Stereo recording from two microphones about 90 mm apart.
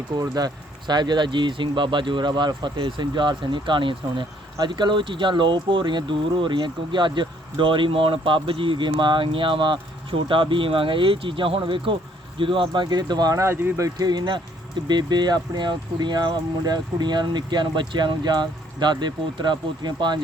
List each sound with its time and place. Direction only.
0.2 s speech: 45° right (ahead or behind)
13.3 s speech: 30° right (ahead or behind)
13.8 s speech: 50° right (ahead or behind)